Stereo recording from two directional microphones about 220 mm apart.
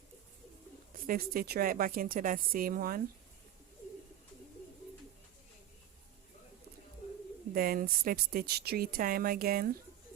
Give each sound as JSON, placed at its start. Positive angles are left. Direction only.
{"t": 1.0, "sound": "speech", "side_deg": -40}
{"t": 7.5, "sound": "speech", "side_deg": -40}